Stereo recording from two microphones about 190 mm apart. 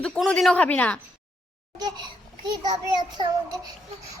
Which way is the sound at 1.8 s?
20° right (ahead or behind).